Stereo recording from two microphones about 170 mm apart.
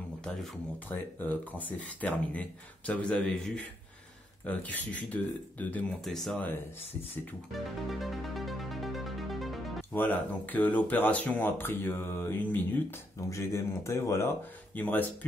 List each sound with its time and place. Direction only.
0.2 s speech: 10° left (ahead or behind)
7.5 s music: centre (ahead or behind)
9.9 s speech: 10° left (ahead or behind)